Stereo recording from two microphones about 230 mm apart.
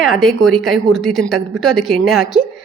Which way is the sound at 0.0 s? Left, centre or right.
Centre.